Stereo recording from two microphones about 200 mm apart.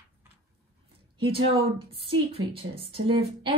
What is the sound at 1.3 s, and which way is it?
A woman's voice, 25° right (ahead or behind).